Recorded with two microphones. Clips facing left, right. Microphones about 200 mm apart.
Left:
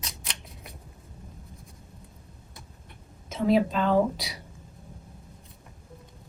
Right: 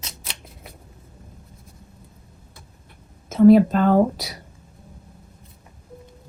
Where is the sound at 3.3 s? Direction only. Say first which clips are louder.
Right 11 dB; 50° right (ahead or behind).